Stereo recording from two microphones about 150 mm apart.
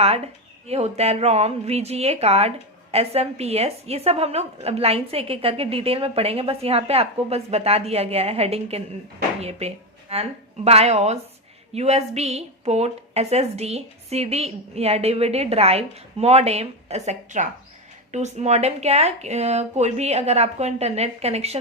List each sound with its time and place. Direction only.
0.7 s a woman's voice: 45° right (ahead or behind)